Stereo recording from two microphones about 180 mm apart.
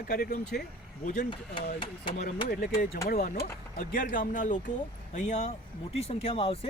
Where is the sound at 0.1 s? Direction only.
55° left (ahead or behind).